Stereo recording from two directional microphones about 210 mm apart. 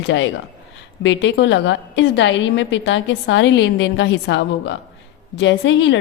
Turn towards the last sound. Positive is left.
turn(degrees=60)  # may be behind; listen again after turning